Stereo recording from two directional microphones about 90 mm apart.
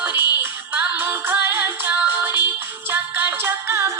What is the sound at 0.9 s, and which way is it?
Music, 25° right (ahead or behind).